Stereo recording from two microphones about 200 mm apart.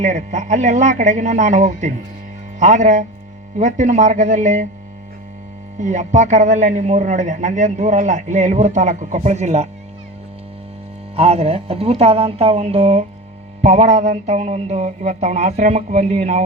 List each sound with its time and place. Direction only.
0.0 s a man's voice: 35° right (ahead or behind)
5.8 s a man's voice: 35° right (ahead or behind)
11.2 s a man's voice: 30° right (ahead or behind)